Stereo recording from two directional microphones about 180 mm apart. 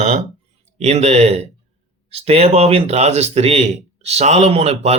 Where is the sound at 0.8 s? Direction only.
40° right (ahead or behind).